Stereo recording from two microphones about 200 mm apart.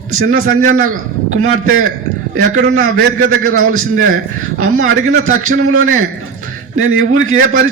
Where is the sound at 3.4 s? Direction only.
90° right.